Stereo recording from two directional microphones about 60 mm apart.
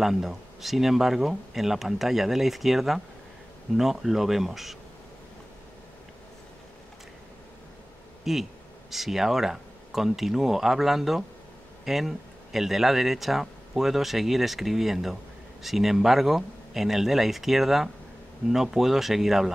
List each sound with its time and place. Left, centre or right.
0.0 s speech: centre
8.2 s speech: centre